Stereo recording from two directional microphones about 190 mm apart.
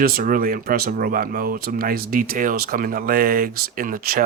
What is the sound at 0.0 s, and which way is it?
Speech, 50° right (ahead or behind).